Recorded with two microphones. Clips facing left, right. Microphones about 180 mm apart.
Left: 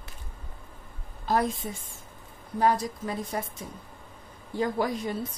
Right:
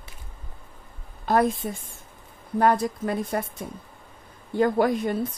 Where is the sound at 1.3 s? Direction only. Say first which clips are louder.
Right 4 dB; 60° right (ahead or behind).